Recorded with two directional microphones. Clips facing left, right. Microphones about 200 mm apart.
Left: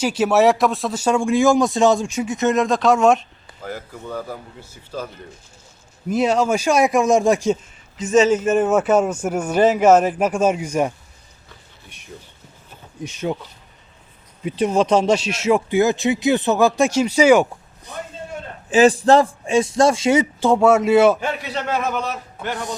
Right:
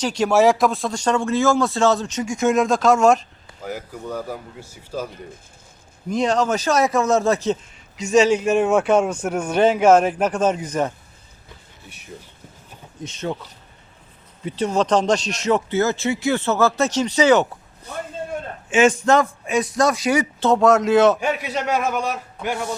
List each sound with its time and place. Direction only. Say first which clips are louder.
0.0 s speech: left 1 dB; 5° left (ahead or behind); by 5.0 s 10° right (ahead or behind)
6.1 s a man's voice: left 2 dB; 5° left (ahead or behind)
13.0 s a man's voice: left 3 dB; 10° left (ahead or behind)
14.4 s a man's voice: left 3 dB; 10° left (ahead or behind)
18.7 s a man's voice: left 3 dB; 35° left (ahead or behind)
20.4 s a man's voice: right 1 dB; 10° left (ahead or behind)
21.2 s a man's voice: right 2 dB; 10° right (ahead or behind)